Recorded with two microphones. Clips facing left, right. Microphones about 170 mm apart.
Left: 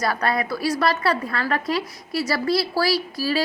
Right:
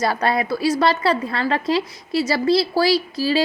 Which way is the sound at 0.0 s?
25° right (ahead or behind).